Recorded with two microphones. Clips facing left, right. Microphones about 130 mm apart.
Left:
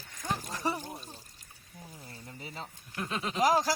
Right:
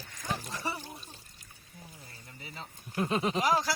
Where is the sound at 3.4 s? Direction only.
40° left (ahead or behind).